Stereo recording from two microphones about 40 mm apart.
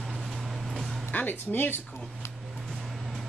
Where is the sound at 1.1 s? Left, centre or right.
Left.